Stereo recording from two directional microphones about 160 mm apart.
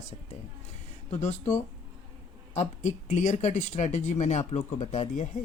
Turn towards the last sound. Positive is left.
turn(degrees=45)  # may be behind; listen again after turning